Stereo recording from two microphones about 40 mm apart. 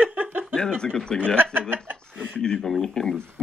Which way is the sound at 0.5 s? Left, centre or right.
Centre.